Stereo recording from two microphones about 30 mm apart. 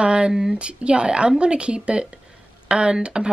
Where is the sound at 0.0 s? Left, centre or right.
Right.